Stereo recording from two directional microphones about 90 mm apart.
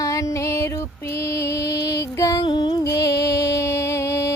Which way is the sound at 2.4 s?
55° left (ahead or behind).